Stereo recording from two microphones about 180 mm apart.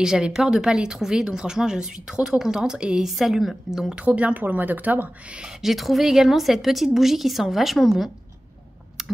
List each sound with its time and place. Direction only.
0.0 s a woman's voice: 5° right (ahead or behind)